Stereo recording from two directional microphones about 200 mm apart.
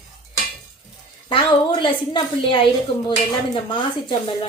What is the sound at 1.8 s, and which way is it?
Speech, 25° left (ahead or behind).